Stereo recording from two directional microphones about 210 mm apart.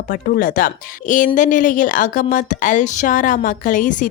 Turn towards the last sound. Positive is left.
turn(degrees=40)  # may be behind; listen again after turning